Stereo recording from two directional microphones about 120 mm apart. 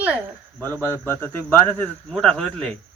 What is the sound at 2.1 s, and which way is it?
Speech, centre (ahead or behind).